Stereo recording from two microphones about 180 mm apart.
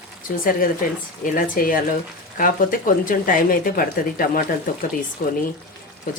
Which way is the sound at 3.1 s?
50° left (ahead or behind).